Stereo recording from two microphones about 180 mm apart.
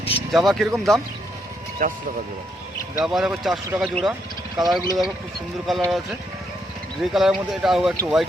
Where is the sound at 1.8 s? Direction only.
50° right (ahead or behind).